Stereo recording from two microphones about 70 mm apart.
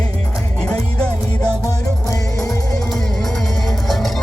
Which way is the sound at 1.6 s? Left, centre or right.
Left.